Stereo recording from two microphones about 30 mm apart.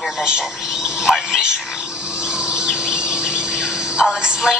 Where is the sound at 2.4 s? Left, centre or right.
Right.